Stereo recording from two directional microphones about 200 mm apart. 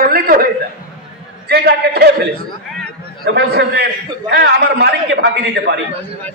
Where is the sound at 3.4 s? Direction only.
55° right (ahead or behind).